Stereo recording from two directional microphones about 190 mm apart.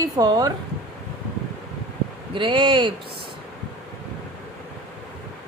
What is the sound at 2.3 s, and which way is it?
Speech, 25° right (ahead or behind).